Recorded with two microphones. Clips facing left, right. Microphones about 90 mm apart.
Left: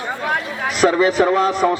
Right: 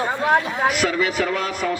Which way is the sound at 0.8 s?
35° left (ahead or behind).